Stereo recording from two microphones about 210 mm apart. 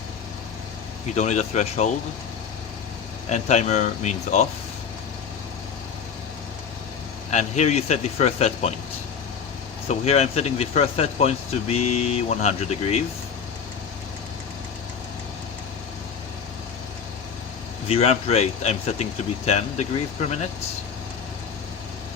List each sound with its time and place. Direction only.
1.1 s speech: 35° left (ahead or behind)
3.2 s speech: 35° left (ahead or behind)
7.3 s speech: 35° left (ahead or behind)
9.9 s speech: 30° left (ahead or behind)
17.8 s speech: 30° left (ahead or behind)